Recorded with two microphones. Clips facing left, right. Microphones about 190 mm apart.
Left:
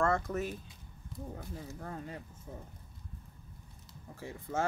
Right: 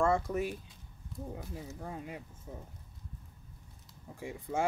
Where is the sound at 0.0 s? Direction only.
10° right (ahead or behind).